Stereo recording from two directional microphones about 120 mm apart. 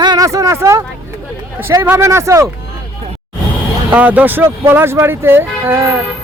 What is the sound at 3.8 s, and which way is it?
Speech, 15° right (ahead or behind).